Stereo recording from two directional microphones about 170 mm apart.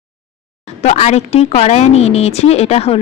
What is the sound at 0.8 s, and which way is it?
Speech, 40° left (ahead or behind).